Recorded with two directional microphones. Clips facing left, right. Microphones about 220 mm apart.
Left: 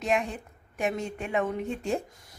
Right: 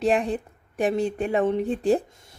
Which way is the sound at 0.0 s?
35° right (ahead or behind).